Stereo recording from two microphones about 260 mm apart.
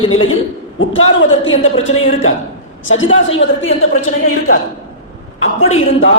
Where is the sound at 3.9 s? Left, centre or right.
Left.